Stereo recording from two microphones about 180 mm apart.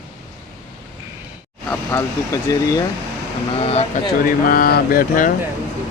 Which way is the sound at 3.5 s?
35° left (ahead or behind).